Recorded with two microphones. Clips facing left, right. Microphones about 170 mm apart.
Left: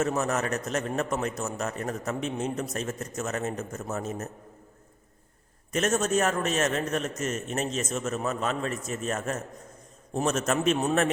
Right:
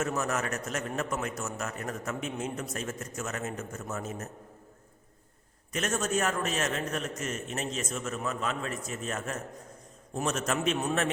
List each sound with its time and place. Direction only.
0.0 s a man's voice: 35° left (ahead or behind)
5.7 s a man's voice: 45° left (ahead or behind)